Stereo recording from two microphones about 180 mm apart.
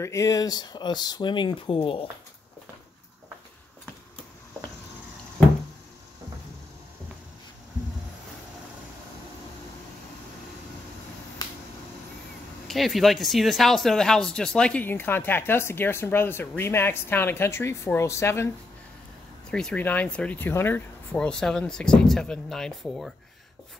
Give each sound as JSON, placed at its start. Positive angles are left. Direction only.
{"t": 0.0, "sound": "speech", "side_deg": 15}
{"t": 12.6, "sound": "speech", "side_deg": 0}
{"t": 19.5, "sound": "speech", "side_deg": 5}